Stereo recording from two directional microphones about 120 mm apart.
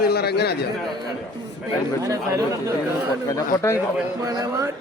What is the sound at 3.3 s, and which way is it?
Speech, 25° left (ahead or behind).